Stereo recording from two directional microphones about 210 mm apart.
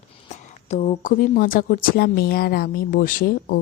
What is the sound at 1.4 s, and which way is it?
A woman's voice, 45° left (ahead or behind).